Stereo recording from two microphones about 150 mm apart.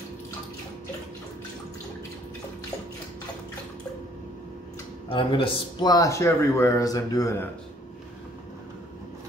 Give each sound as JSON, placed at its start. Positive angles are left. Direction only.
{"t": 5.1, "sound": "a man's voice", "side_deg": 35}